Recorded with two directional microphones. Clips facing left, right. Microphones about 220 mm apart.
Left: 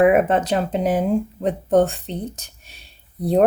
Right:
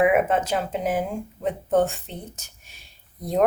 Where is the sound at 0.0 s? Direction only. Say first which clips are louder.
Left 4 dB; 35° left (ahead or behind).